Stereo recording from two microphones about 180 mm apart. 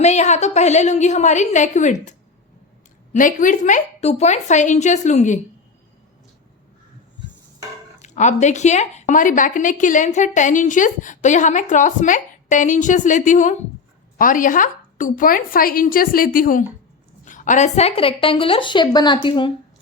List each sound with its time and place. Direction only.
0.0 s a woman's voice: 40° left (ahead or behind)
8.0 s a woman's voice: 40° left (ahead or behind)